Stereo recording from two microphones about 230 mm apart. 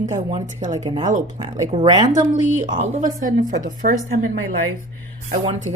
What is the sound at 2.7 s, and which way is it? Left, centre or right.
A woman's voice, right.